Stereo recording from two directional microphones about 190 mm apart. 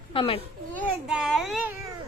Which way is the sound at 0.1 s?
30° left (ahead or behind).